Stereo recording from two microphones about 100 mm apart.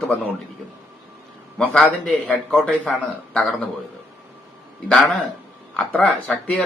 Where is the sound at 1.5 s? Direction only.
5° left (ahead or behind).